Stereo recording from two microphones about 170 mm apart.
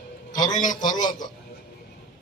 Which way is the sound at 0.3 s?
25° left (ahead or behind).